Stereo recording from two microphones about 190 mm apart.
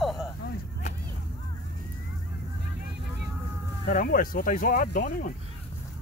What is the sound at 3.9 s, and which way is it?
Speech, 50° left (ahead or behind).